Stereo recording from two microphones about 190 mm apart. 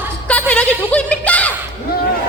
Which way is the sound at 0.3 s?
5° left (ahead or behind).